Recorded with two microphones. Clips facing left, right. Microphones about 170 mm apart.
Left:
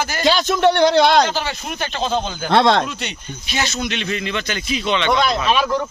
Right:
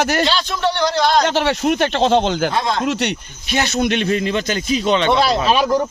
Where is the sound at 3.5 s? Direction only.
50° right (ahead or behind).